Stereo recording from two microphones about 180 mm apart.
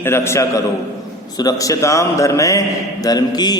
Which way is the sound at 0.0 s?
15° left (ahead or behind).